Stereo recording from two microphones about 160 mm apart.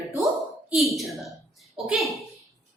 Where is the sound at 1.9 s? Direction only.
Centre (ahead or behind).